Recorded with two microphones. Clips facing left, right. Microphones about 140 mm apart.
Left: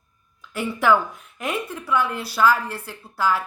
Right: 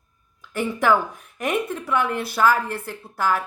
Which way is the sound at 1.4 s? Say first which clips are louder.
Right 4 dB; 50° right (ahead or behind).